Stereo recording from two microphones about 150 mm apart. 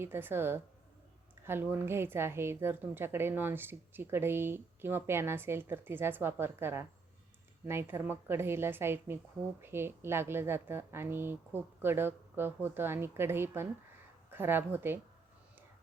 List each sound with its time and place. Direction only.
0.0 s a woman's voice: 15° right (ahead or behind)